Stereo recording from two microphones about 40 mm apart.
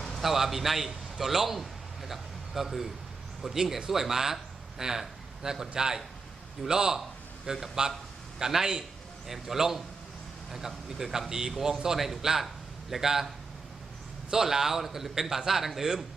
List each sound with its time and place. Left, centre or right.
0.2 s a man's voice: centre